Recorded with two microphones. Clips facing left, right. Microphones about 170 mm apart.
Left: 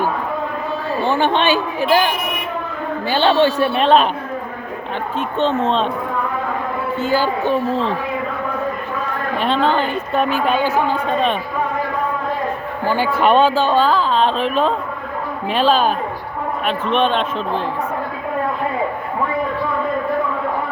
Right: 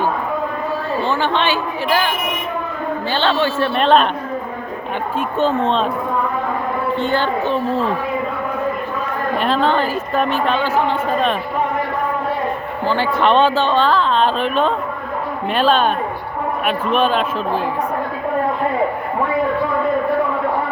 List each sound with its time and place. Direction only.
1.0 s a man's voice: 15° left (ahead or behind)
3.1 s a man's voice: 15° left (ahead or behind)
3.8 s speech: centre (ahead or behind)
5.4 s speech: centre (ahead or behind)
7.0 s speech: 5° left (ahead or behind)
9.4 s speech: centre (ahead or behind)
12.9 s speech: 10° left (ahead or behind)